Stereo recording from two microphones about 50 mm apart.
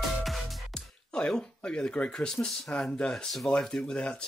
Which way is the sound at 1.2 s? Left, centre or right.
Left.